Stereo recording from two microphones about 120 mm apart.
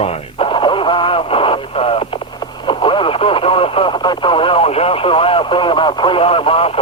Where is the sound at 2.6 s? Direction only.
45° left (ahead or behind).